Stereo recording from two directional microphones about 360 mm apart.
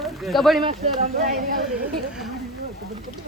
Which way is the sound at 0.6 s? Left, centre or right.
Centre.